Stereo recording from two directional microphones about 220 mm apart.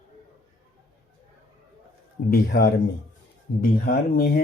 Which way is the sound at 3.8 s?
45° left (ahead or behind).